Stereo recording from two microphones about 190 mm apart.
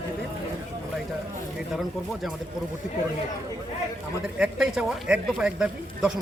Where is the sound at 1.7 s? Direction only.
Centre (ahead or behind).